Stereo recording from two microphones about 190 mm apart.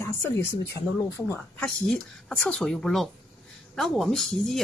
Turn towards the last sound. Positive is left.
turn(degrees=0)  # may be behind; listen again after turning